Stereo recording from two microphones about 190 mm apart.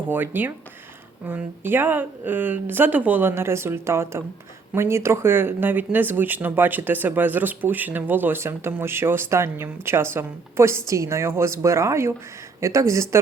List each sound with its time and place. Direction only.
0.1 s speech: 10° right (ahead or behind)